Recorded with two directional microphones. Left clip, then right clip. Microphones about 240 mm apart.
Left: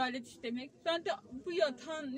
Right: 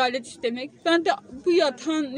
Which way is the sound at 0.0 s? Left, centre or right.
Right.